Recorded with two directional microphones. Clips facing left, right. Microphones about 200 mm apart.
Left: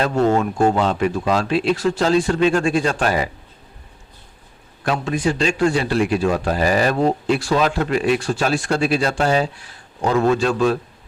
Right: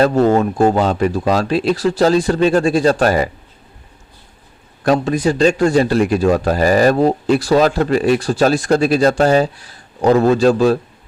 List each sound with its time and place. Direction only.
0.0 s a man's voice: 35° right (ahead or behind)
4.8 s a man's voice: 40° right (ahead or behind)